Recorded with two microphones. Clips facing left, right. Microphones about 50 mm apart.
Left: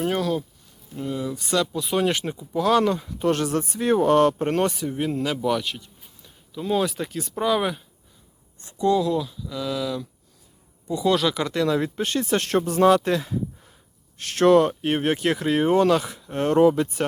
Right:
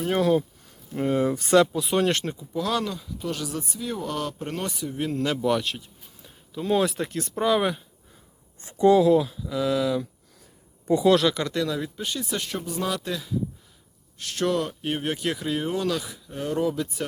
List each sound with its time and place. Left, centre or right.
0.9 s speech: right
1.7 s speech: centre
2.5 s speech: left
3.2 s speech: left
4.9 s speech: centre
5.2 s speech: centre
8.6 s speech: right
11.0 s speech: centre
11.3 s speech: centre
11.7 s speech: left
12.4 s speech: left
12.8 s speech: left
16.3 s speech: left